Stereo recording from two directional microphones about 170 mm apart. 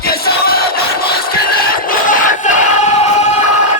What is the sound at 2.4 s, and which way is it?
Choir, 40° left (ahead or behind).